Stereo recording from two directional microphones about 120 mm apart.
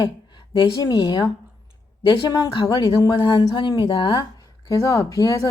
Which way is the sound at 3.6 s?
45° left (ahead or behind).